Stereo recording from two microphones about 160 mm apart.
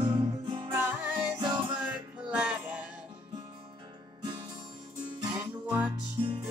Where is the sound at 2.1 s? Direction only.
5° right (ahead or behind).